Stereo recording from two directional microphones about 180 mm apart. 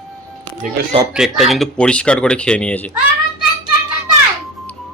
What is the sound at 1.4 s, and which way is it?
Speech, centre (ahead or behind).